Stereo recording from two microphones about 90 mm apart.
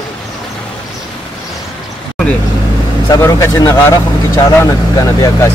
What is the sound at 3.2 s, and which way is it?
Speech, 30° left (ahead or behind).